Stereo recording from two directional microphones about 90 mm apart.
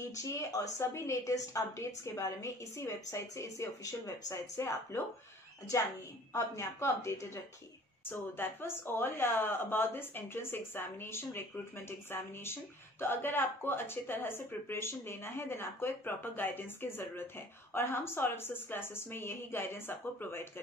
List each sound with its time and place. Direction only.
0.2 s a woman's voice: 35° left (ahead or behind)
6.3 s a woman's voice: 35° left (ahead or behind)
8.0 s speech: 25° left (ahead or behind)